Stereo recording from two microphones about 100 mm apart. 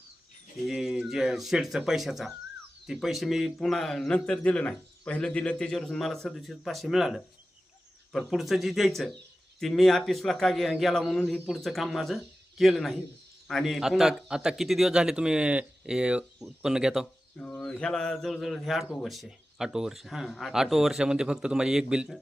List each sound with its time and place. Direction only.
0.7 s a man's voice: 5° right (ahead or behind)
11.2 s speech: 15° left (ahead or behind)
11.4 s a man's voice: centre (ahead or behind)
17.3 s a man's voice: 10° left (ahead or behind); by 22.2 s 10° right (ahead or behind)